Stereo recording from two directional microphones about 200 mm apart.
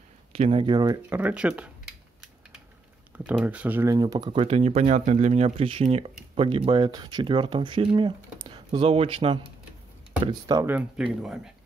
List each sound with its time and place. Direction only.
0.3 s speech: 30° right (ahead or behind)
1.1 s speech: 5° right (ahead or behind)
3.3 s speech: 5° right (ahead or behind); by 9.1 s 30° right (ahead or behind)
10.2 s speech: 15° right (ahead or behind)